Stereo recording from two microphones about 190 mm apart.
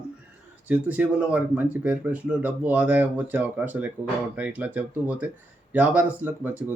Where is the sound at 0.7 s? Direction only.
5° right (ahead or behind).